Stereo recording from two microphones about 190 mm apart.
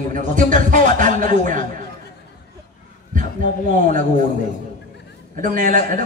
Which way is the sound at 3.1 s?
40° right (ahead or behind).